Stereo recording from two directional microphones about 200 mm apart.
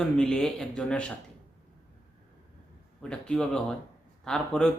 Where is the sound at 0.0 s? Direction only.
5° left (ahead or behind).